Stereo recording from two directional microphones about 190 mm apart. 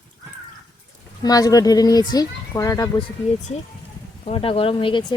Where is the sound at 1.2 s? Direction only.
20° left (ahead or behind).